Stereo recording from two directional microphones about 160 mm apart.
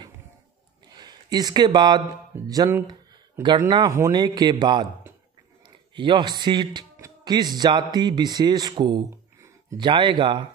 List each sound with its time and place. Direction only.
0.9 s speech: 25° right (ahead or behind)
5.9 s a man's voice: 30° right (ahead or behind)